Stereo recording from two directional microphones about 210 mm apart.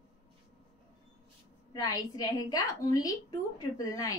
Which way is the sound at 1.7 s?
15° left (ahead or behind).